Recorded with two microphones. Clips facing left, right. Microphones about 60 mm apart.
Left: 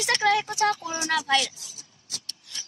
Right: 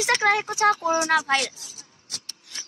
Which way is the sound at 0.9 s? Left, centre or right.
Right.